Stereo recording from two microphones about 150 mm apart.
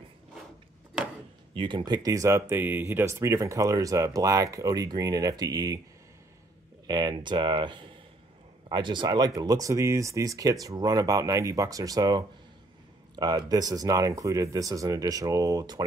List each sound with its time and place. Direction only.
1.5 s speech: 35° right (ahead or behind)
1.9 s speech: 20° right (ahead or behind)
6.9 s speech: 30° right (ahead or behind)